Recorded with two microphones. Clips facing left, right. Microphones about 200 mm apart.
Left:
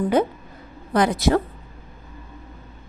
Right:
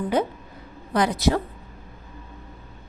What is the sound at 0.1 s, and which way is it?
A woman's voice, 50° left (ahead or behind).